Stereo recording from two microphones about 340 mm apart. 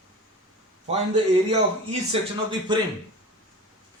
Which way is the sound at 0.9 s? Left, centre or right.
Centre.